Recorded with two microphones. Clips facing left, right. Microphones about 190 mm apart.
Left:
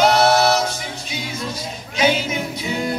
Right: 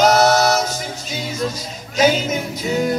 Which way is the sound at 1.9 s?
40° right (ahead or behind).